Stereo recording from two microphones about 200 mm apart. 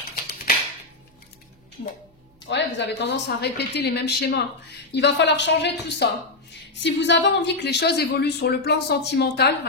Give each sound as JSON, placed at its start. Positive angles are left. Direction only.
{"t": 2.5, "sound": "a woman's voice", "side_deg": 60}